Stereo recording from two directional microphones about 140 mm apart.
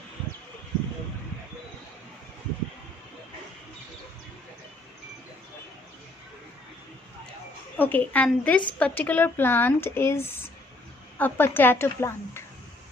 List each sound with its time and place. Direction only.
7.8 s speech: 15° left (ahead or behind)